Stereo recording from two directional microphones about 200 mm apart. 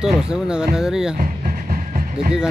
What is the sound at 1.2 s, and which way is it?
Music, 45° right (ahead or behind).